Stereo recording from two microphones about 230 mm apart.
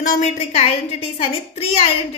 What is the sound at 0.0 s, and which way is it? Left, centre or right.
A woman's voice, left.